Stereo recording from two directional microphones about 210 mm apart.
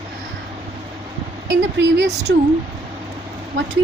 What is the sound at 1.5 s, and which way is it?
Speech, 55° right (ahead or behind).